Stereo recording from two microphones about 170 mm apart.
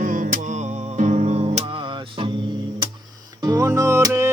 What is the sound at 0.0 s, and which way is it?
Music, 55° right (ahead or behind).